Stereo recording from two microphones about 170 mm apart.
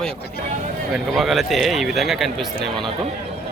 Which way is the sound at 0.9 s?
Centre (ahead or behind).